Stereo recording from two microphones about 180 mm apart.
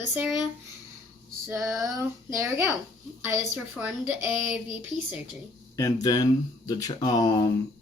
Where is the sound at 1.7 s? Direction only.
15° right (ahead or behind).